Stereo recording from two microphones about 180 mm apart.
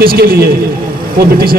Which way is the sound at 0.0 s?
55° right (ahead or behind).